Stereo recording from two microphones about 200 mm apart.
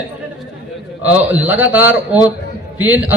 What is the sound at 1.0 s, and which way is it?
A man's voice, 10° right (ahead or behind).